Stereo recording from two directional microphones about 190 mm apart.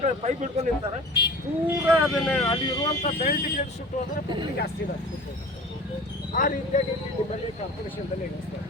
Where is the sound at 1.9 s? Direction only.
5° right (ahead or behind).